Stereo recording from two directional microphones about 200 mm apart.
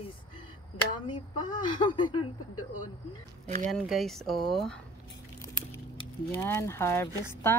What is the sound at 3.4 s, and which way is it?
Speech, 40° right (ahead or behind).